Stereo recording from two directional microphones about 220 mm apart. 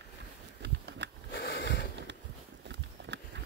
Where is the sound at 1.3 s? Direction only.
55° left (ahead or behind).